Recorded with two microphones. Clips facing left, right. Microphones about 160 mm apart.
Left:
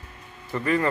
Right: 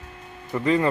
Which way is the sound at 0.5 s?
20° right (ahead or behind).